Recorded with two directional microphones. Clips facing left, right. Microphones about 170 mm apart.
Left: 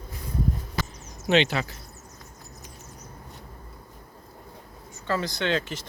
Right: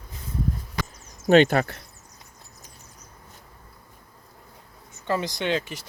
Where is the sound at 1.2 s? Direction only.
45° right (ahead or behind).